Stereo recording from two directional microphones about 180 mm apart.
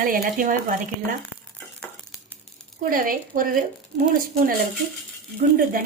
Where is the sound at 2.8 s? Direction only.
50° right (ahead or behind).